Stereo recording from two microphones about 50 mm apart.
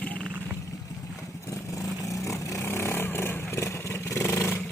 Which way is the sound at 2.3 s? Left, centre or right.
Left.